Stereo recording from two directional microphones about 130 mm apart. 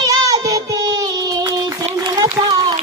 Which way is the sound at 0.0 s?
30° right (ahead or behind).